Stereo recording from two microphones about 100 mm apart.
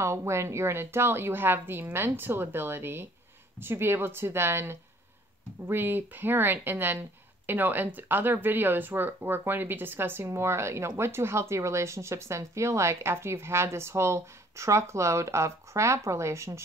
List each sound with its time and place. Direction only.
0.0 s speech: 30° right (ahead or behind)